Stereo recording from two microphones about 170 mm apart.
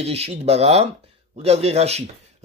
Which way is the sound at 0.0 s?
35° right (ahead or behind).